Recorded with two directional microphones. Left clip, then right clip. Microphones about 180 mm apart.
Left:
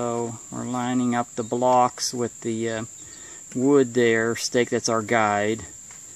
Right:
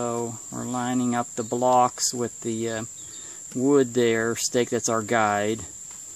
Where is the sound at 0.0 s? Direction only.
5° left (ahead or behind).